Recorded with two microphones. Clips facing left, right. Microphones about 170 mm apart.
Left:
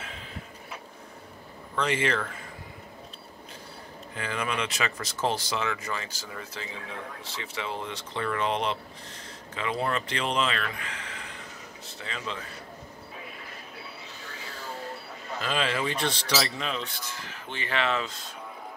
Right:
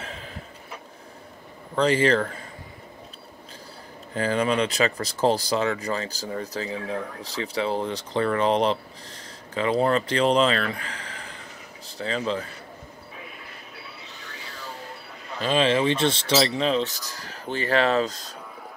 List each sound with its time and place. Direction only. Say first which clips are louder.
1.8 s speech: right 7 dB; 35° right (ahead or behind)
4.1 s speech: right 9 dB; 35° right (ahead or behind)
15.4 s speech: right 8 dB; 25° right (ahead or behind); by 18.3 s 40° right (ahead or behind)